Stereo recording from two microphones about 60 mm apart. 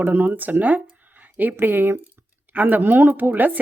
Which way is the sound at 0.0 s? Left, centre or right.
Right.